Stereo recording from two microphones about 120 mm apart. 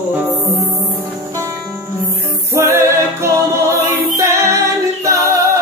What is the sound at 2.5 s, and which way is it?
Music, 20° right (ahead or behind).